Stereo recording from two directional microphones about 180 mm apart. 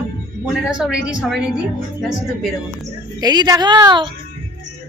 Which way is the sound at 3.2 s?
20° right (ahead or behind).